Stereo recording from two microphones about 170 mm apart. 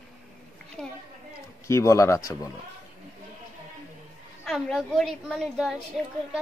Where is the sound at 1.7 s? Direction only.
15° left (ahead or behind).